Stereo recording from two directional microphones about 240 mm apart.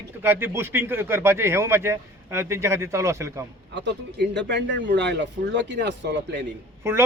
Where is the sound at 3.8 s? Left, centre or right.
Right.